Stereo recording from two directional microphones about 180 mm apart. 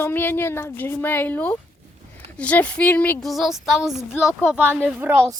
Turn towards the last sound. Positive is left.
turn(degrees=-10)  # may be behind; listen again after turning